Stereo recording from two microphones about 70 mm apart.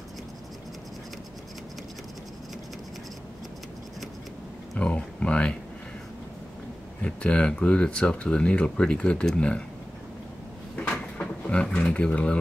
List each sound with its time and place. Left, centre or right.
4.7 s speech: centre
7.0 s speech: centre
10.8 s a sound: centre